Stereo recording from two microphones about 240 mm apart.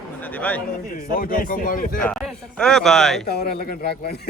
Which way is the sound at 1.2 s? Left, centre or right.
Left.